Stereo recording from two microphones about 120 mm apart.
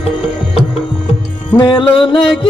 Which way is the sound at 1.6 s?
45° left (ahead or behind).